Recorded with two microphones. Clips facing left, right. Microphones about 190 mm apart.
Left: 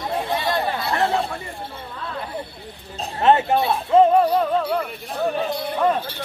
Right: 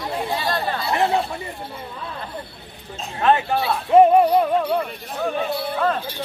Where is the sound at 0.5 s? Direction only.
20° left (ahead or behind).